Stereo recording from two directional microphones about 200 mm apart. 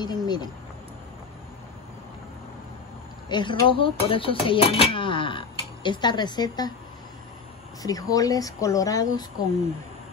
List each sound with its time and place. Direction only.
0.0 s speech: 20° left (ahead or behind)
3.3 s speech: 25° left (ahead or behind)
7.8 s speech: 20° left (ahead or behind)